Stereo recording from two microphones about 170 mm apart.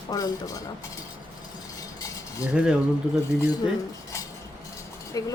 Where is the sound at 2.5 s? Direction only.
5° right (ahead or behind).